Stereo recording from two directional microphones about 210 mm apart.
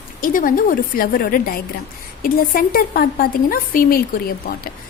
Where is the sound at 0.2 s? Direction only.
40° left (ahead or behind).